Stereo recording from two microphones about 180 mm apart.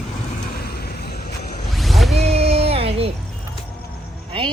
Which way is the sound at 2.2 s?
35° right (ahead or behind).